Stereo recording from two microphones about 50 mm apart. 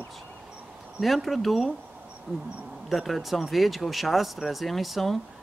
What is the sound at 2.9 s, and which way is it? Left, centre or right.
Speech, centre.